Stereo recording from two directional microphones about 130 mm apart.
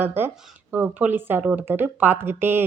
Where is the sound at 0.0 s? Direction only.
15° right (ahead or behind).